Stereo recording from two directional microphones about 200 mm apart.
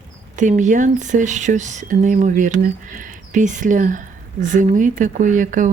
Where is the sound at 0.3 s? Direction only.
40° right (ahead or behind).